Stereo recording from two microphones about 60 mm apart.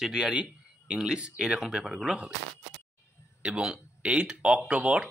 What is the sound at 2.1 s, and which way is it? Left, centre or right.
Speech, centre.